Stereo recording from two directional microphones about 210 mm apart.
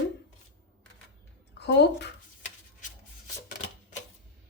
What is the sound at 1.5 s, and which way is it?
Speech, 55° left (ahead or behind).